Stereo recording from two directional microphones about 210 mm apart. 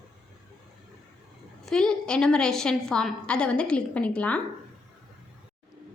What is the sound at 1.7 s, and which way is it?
A woman's voice, 5° left (ahead or behind).